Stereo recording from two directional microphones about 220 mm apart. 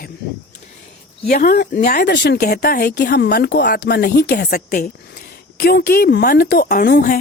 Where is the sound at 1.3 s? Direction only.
40° left (ahead or behind).